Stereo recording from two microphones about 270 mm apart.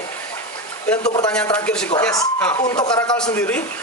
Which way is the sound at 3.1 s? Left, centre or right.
Centre.